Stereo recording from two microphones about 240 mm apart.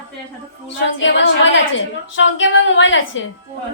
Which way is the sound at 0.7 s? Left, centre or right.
Left.